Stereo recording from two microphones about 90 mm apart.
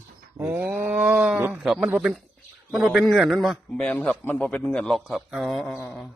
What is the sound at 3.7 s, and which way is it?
A man's voice, 15° left (ahead or behind).